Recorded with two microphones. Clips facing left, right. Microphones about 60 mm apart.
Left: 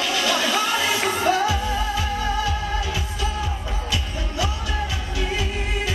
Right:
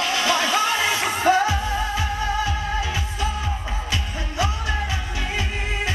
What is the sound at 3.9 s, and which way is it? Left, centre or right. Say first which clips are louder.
Music: left 1 dB; right.